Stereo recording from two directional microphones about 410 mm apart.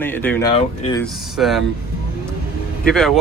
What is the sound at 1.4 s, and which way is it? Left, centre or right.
Speech, centre.